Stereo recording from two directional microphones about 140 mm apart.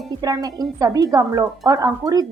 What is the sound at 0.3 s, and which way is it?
A woman's voice, 25° right (ahead or behind).